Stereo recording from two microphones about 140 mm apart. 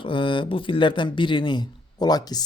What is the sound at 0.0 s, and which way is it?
Speech, 35° left (ahead or behind).